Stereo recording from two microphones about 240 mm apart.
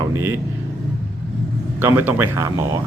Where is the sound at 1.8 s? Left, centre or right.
Centre.